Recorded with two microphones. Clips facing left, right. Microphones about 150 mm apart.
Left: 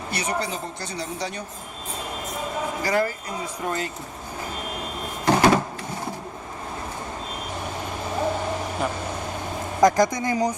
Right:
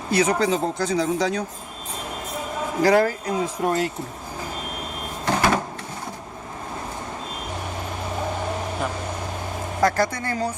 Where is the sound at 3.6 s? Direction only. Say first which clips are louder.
Right 5 dB; 55° right (ahead or behind).